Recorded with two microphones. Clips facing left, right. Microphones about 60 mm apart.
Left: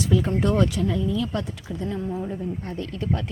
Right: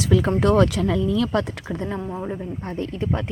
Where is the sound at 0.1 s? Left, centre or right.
Right.